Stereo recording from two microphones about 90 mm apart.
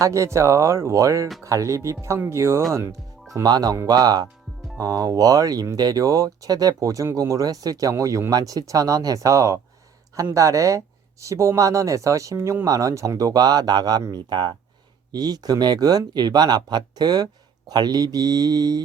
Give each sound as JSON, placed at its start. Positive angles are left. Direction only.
{"t": 0.0, "sound": "speech", "side_deg": -35}
{"t": 3.4, "sound": "speech", "side_deg": -45}
{"t": 12.6, "sound": "speech", "side_deg": -40}